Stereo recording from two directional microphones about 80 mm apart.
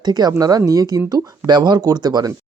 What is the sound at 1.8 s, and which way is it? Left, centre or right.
Speech, right.